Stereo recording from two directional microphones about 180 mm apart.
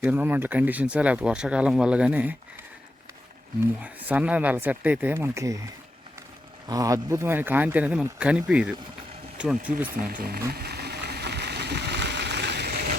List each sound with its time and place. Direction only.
0.0 s speech: 10° right (ahead or behind)
3.8 s speech: 10° right (ahead or behind)
6.7 s speech: 20° right (ahead or behind)
10.1 s speech: 55° right (ahead or behind)
10.5 s a sound: 60° right (ahead or behind)